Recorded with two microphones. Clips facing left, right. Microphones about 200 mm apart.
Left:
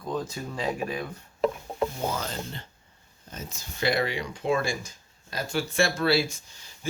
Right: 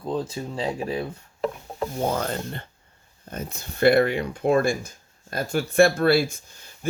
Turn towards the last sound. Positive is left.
turn(degrees=-55)  # may be behind; listen again after turning